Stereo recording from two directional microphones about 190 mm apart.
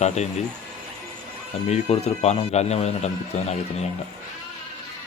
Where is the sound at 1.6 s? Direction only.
35° left (ahead or behind).